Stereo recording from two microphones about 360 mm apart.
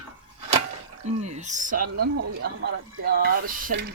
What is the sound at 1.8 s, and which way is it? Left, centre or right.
Speech, right.